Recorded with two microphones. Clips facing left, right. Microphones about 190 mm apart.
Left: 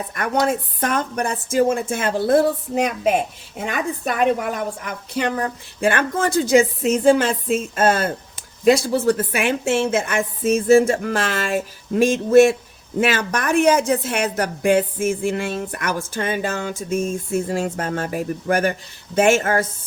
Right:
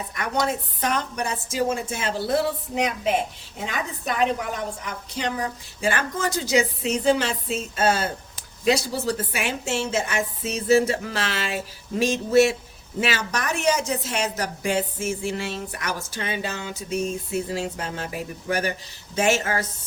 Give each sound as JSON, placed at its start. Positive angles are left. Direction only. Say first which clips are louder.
{"t": 0.1, "sound": "a woman's voice", "louder": "left 5 dB", "side_deg": 50}
{"t": 5.1, "sound": "a woman's voice", "louder": "left 5 dB", "side_deg": 55}